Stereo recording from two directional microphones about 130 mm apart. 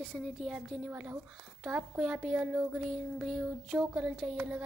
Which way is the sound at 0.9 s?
10° right (ahead or behind).